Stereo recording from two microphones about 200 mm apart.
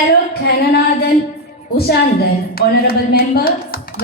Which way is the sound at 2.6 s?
50° left (ahead or behind).